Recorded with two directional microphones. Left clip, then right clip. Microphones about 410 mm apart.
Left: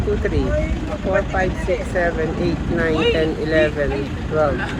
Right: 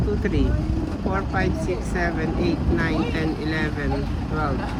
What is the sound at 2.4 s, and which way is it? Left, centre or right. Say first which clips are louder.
Speech: left 2 dB; centre.